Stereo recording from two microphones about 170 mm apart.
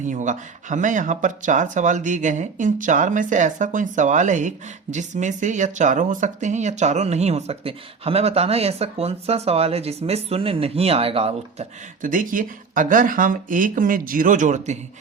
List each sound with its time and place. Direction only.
0.0 s speech: 45° right (ahead or behind)
12.0 s speech: 50° right (ahead or behind)